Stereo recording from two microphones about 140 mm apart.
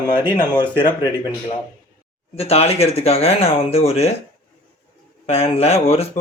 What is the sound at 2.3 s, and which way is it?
Speech, 45° left (ahead or behind).